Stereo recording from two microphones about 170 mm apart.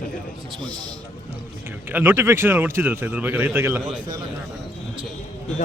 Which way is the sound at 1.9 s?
10° right (ahead or behind).